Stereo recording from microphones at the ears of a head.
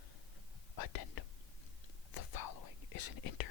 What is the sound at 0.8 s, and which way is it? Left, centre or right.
Whispering, left.